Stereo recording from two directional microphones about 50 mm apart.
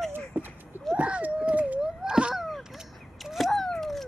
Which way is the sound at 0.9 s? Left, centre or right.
Right.